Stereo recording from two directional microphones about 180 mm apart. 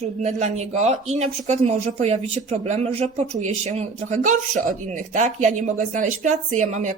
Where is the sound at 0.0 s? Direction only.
40° right (ahead or behind).